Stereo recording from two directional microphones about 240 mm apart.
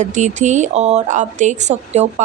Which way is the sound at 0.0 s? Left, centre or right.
Right.